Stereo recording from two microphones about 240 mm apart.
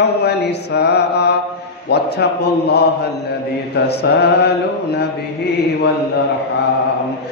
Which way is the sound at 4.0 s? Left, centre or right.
Left.